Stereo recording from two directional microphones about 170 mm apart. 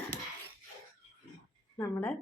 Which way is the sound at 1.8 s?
15° left (ahead or behind).